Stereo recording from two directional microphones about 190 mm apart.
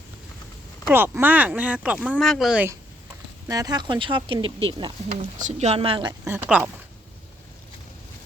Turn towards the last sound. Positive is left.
turn(degrees=-5)  # may be behind; listen again after turning